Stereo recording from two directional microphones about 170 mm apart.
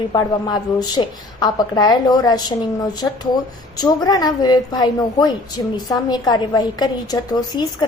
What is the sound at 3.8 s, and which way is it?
A woman's voice, 20° left (ahead or behind).